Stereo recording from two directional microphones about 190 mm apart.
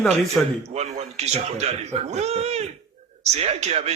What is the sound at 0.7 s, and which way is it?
Speech, 35° right (ahead or behind).